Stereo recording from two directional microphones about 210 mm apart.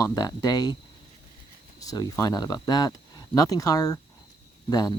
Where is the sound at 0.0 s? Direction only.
15° left (ahead or behind).